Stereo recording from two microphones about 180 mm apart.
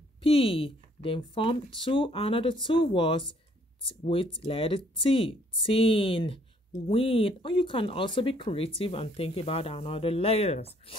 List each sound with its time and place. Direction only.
0.2 s speech: 30° left (ahead or behind)